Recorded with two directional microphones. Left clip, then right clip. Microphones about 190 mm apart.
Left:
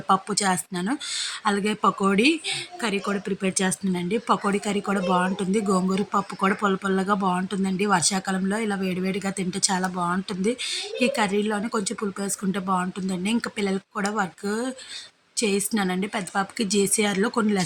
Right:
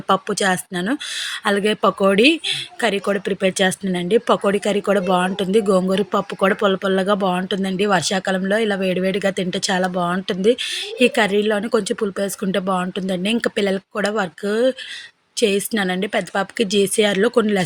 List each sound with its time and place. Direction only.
0.1 s speech: 20° right (ahead or behind)